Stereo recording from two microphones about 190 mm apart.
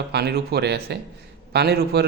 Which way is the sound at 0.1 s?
60° right (ahead or behind).